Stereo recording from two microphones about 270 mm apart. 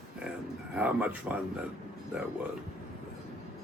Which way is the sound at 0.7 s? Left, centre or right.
Centre.